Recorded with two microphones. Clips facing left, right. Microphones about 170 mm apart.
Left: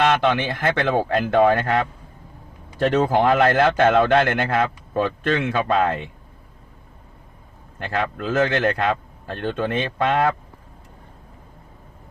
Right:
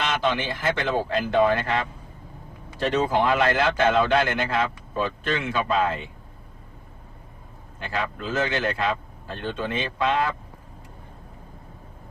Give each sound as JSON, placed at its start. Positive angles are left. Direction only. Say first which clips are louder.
{"t": 0.0, "sound": "a man's voice", "louder": "left 6 dB", "side_deg": 60}
{"t": 7.8, "sound": "a man's voice", "louder": "left 4 dB", "side_deg": 55}